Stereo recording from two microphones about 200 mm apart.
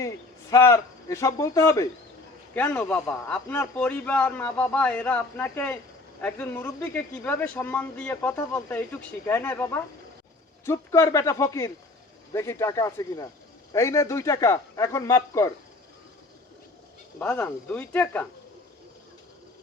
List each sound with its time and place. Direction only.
0.5 s speech: 15° left (ahead or behind)
17.2 s speech: 10° left (ahead or behind)